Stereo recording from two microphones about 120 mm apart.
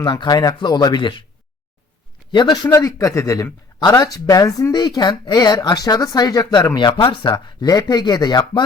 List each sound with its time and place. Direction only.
0.0 s a man's voice: 35° left (ahead or behind)
2.3 s a man's voice: 35° left (ahead or behind)